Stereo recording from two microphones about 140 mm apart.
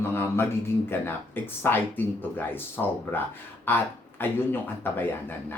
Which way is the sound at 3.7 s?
15° left (ahead or behind).